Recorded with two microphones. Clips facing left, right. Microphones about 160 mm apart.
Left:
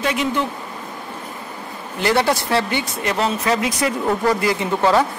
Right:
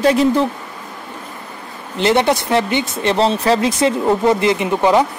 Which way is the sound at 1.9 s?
20° right (ahead or behind).